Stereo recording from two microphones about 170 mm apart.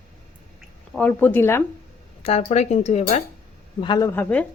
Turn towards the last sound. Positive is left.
turn(degrees=10)  # may be behind; listen again after turning